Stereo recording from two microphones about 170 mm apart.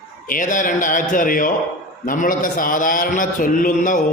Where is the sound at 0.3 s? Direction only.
50° left (ahead or behind).